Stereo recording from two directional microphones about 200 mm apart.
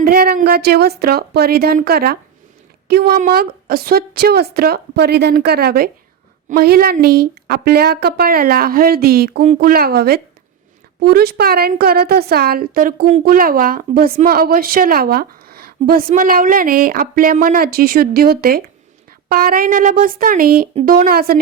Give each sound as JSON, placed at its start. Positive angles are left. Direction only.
{"t": 0.0, "sound": "a woman's voice", "side_deg": -50}